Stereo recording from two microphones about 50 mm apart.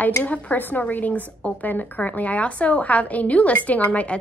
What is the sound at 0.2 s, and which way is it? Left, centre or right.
A woman's voice, left.